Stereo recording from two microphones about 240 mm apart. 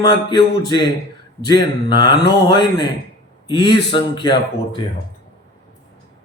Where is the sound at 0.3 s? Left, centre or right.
Centre.